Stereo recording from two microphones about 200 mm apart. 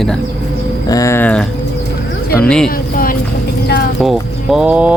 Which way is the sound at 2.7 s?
45° left (ahead or behind).